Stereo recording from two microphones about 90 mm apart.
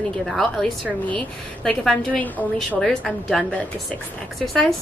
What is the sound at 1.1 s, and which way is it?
A woman's voice, 15° left (ahead or behind).